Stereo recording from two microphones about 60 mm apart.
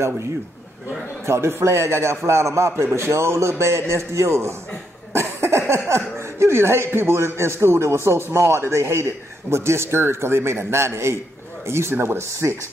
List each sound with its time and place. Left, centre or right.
1.2 s a man's voice: right
5.1 s cough: right
5.7 s a man's voice: right